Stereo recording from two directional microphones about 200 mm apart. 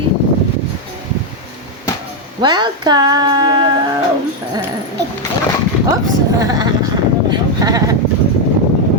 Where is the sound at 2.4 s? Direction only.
20° right (ahead or behind).